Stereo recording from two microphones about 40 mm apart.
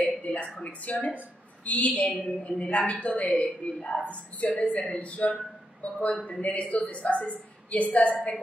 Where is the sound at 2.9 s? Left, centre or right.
Left.